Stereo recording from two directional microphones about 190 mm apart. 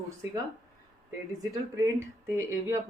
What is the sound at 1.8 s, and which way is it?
Speech, 15° right (ahead or behind).